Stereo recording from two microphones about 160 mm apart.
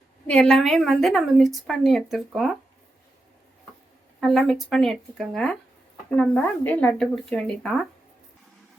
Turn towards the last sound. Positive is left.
turn(degrees=5)  # may be behind; listen again after turning